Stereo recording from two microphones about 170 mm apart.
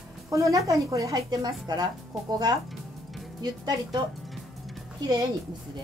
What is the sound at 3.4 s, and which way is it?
Speech, 25° right (ahead or behind).